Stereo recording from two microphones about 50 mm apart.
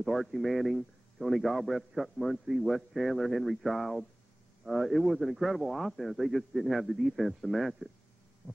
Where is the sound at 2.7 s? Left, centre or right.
Centre.